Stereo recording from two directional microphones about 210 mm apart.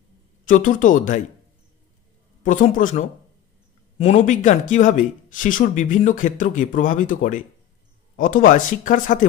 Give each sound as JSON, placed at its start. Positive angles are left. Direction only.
{"t": 0.5, "sound": "speech", "side_deg": 40}
{"t": 2.4, "sound": "speech", "side_deg": 40}